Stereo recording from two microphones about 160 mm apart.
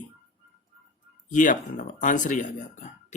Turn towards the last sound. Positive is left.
turn(degrees=50)  # may be behind; listen again after turning